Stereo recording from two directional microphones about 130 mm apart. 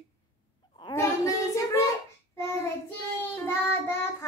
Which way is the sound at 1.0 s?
25° left (ahead or behind).